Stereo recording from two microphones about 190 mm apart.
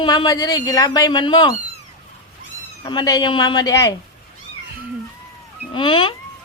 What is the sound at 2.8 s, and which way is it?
A woman's voice, 20° left (ahead or behind).